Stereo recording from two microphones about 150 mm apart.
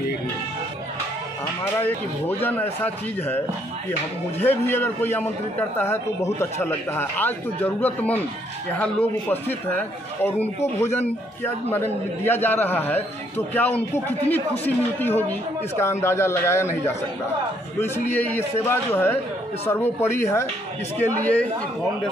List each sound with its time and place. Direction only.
1.8 s a man's voice: 15° left (ahead or behind)
11.7 s a man's voice: 15° left (ahead or behind)